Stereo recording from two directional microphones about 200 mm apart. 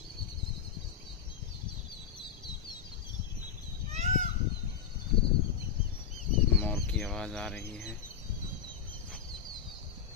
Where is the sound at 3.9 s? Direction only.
35° right (ahead or behind).